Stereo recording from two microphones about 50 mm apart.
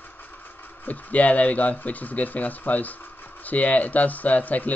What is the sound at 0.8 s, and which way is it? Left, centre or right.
Speech, left.